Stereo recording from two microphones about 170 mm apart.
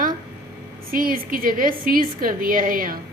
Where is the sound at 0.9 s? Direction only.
55° right (ahead or behind).